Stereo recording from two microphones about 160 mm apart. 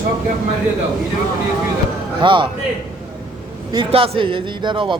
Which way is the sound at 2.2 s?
30° right (ahead or behind).